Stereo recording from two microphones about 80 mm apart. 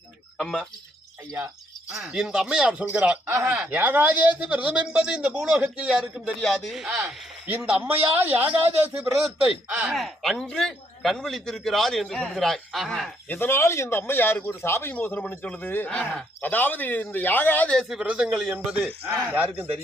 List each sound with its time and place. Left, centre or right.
0.3 s a sound: centre
1.9 s speech: centre
3.2 s speech: right
3.5 s a man's voice: right
5.5 s speech: centre
6.4 s a man's voice: centre
7.6 s a man's voice: centre
9.9 s a man's voice: centre
13.2 s speech: left
17.8 s a man's voice: centre